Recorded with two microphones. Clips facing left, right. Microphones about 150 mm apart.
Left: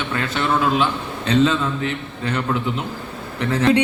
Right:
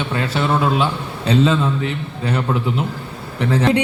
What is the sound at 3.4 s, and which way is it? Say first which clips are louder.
Speech: right 1 dB; 30° right (ahead or behind).